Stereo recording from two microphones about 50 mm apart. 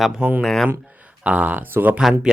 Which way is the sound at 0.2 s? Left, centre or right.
Right.